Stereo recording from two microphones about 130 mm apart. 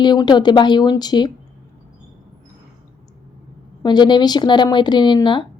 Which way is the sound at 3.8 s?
35° left (ahead or behind).